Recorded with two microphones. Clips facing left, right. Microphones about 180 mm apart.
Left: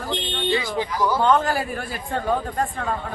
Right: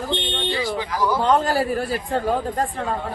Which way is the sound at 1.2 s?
35° right (ahead or behind).